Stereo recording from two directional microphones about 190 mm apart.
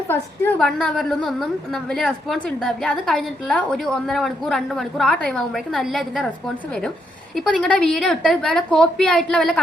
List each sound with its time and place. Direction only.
0.1 s a woman's voice: 10° left (ahead or behind)
7.3 s a woman's voice: 5° left (ahead or behind)